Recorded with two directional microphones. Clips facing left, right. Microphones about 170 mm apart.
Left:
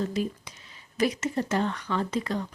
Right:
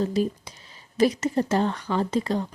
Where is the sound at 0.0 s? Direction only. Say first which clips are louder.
Right 5 dB; 35° right (ahead or behind).